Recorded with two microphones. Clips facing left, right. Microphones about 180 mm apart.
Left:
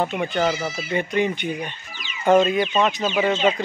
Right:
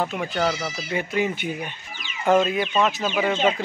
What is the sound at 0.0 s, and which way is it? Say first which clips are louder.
Speech: left 2 dB; centre (ahead or behind).